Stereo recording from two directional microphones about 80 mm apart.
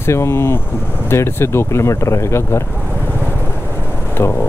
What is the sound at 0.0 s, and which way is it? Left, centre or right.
Speech, left.